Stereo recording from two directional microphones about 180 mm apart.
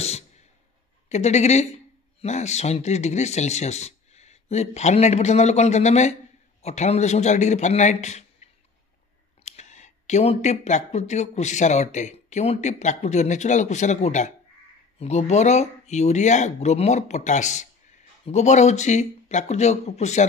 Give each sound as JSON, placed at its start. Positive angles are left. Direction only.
{"t": 1.0, "sound": "speech", "side_deg": 40}
{"t": 9.4, "sound": "speech", "side_deg": 40}